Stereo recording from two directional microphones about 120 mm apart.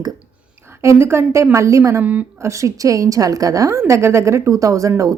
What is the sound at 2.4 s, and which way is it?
A woman's voice, 25° right (ahead or behind).